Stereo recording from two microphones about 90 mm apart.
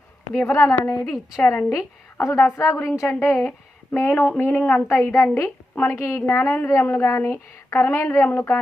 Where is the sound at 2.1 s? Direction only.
30° left (ahead or behind).